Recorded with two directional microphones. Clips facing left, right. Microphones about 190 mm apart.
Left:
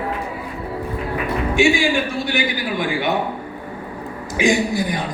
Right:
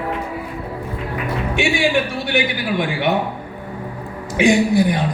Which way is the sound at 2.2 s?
60° right (ahead or behind).